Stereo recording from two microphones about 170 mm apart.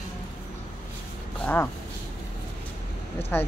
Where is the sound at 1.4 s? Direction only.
10° left (ahead or behind).